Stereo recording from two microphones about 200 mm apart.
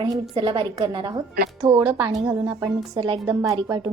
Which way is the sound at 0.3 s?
20° right (ahead or behind).